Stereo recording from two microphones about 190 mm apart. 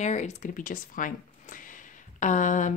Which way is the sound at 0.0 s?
40° left (ahead or behind).